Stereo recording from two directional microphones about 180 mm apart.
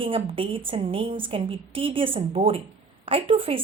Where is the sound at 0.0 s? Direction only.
30° right (ahead or behind).